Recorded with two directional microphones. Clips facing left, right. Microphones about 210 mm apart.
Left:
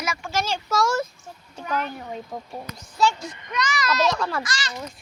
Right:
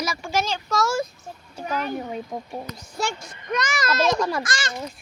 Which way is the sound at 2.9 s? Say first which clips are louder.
Left 6 dB; 50° right (ahead or behind).